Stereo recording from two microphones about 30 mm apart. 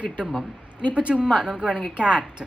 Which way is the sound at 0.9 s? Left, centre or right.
Right.